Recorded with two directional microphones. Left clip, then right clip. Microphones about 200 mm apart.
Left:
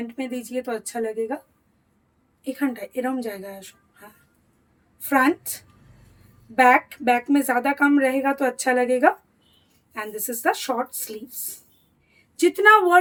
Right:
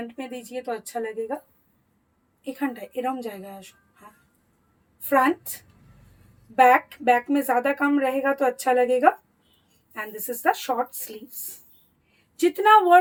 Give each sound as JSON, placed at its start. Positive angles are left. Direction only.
{"t": 0.2, "sound": "speech", "side_deg": 25}
{"t": 2.4, "sound": "speech", "side_deg": 20}
{"t": 4.9, "sound": "speech", "side_deg": 20}
{"t": 12.4, "sound": "speech", "side_deg": 25}